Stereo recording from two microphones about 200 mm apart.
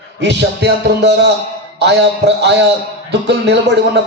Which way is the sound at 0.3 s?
55° right (ahead or behind).